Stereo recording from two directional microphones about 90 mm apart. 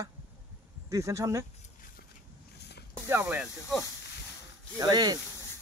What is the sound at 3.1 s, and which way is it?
Speech, 25° right (ahead or behind).